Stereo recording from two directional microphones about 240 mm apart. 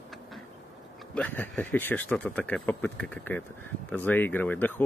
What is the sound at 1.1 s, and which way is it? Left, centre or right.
Speech, centre.